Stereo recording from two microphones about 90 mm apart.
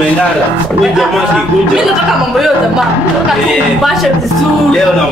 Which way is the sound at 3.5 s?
Centre (ahead or behind).